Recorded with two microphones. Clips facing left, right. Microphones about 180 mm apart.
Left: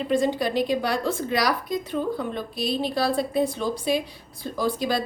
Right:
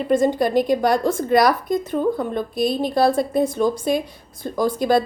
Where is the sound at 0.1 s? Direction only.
50° right (ahead or behind).